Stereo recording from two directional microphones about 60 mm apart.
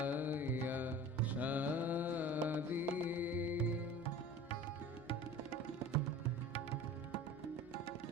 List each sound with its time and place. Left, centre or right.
0.0 s music: right